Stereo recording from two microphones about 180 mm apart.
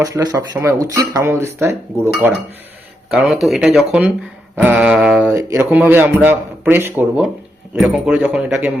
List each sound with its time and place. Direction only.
0.0 s speech: 20° right (ahead or behind)
3.1 s speech: centre (ahead or behind)